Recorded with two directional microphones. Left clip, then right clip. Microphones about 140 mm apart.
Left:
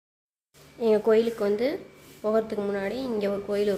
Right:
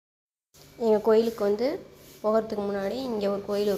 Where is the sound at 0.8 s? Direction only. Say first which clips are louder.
Even; centre (ahead or behind).